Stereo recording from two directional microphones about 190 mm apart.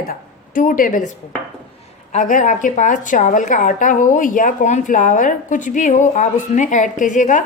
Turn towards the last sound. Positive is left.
turn(degrees=40)  # may be behind; listen again after turning